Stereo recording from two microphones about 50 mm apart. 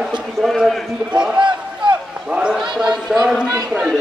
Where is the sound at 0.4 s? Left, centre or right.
Centre.